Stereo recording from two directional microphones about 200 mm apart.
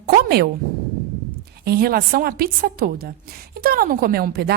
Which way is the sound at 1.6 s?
50° right (ahead or behind).